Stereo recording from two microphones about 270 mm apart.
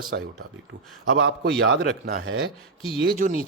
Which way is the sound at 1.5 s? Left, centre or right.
Right.